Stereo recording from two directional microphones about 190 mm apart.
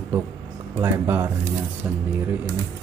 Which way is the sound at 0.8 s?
10° right (ahead or behind).